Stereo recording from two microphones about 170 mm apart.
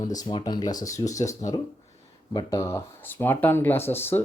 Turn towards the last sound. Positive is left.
turn(degrees=10)  # may be behind; listen again after turning